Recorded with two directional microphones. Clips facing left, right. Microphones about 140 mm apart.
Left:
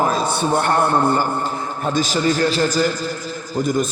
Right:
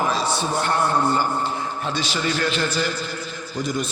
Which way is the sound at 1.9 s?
40° left (ahead or behind).